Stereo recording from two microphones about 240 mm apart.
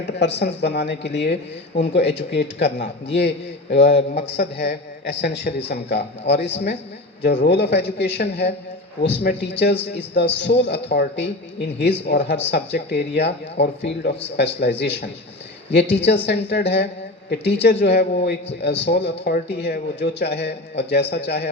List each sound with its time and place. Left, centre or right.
0.2 s speech: left